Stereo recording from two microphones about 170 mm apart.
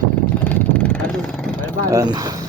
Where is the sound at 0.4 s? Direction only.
10° left (ahead or behind).